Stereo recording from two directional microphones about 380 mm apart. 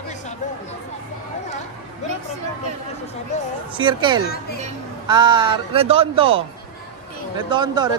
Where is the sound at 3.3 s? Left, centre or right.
Centre.